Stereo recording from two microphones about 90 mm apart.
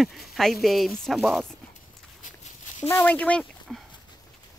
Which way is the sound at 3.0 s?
15° left (ahead or behind).